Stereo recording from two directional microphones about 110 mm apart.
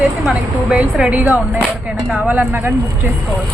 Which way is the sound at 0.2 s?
5° right (ahead or behind).